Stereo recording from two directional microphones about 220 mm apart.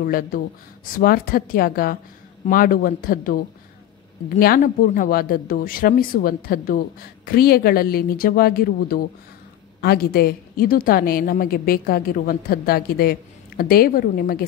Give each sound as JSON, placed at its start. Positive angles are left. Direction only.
{"t": 0.0, "sound": "a woman's voice", "side_deg": 40}